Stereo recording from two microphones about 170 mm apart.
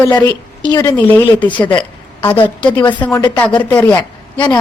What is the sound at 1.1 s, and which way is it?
A woman's voice, 10° left (ahead or behind).